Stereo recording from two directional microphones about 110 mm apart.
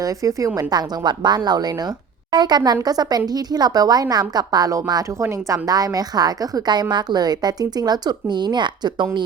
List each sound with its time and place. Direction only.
0.0 s a woman's voice: 30° right (ahead or behind)